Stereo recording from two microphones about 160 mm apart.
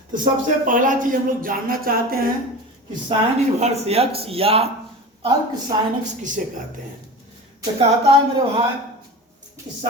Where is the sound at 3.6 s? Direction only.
40° right (ahead or behind).